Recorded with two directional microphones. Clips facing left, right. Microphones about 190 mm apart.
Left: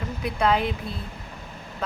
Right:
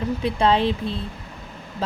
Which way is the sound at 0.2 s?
30° right (ahead or behind).